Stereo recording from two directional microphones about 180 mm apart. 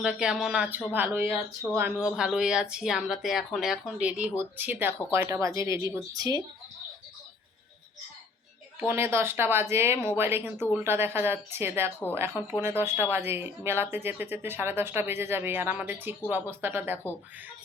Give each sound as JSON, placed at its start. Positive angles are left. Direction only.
{"t": 0.0, "sound": "speech", "side_deg": -5}
{"t": 8.8, "sound": "speech", "side_deg": -10}
{"t": 12.4, "sound": "speech", "side_deg": 20}
{"t": 12.8, "sound": "speech", "side_deg": -10}